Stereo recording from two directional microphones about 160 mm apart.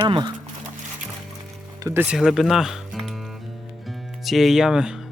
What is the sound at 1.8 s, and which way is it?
Speech, 15° right (ahead or behind).